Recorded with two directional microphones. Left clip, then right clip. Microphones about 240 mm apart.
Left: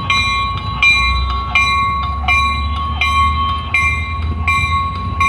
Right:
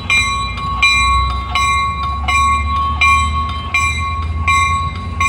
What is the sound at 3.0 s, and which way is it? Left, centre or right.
Train, left.